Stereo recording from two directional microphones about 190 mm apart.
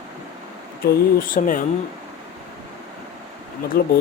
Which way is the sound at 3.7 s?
55° left (ahead or behind).